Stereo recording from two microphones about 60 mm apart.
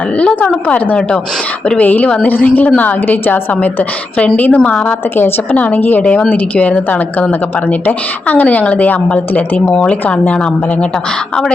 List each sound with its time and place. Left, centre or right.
0.2 s a woman's voice: left
5.1 s a woman's voice: left